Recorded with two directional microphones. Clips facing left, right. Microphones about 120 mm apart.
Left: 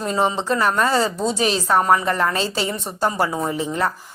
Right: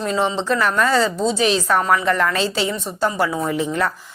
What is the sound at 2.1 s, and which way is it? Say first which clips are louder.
Speech: right 2 dB; 30° left (ahead or behind).